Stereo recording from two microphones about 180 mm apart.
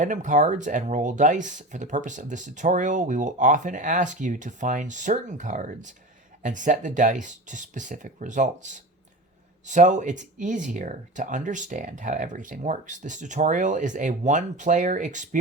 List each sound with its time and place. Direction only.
0.0 s speech: 45° right (ahead or behind)